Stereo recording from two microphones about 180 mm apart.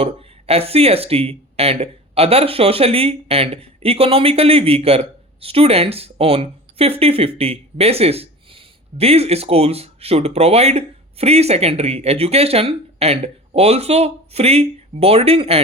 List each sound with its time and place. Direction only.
0.0 s speech: 35° right (ahead or behind)